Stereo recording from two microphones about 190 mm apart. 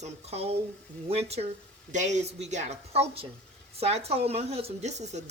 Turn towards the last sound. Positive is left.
turn(degrees=-35)  # may be behind; listen again after turning